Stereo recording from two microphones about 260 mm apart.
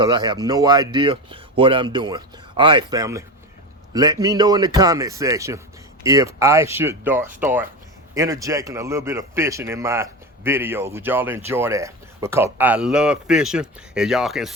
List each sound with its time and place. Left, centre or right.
0.0 s a man's voice: centre